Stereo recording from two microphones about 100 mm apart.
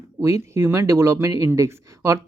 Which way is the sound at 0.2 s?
30° right (ahead or behind).